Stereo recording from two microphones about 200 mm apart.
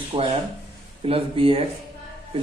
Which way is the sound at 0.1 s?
25° right (ahead or behind).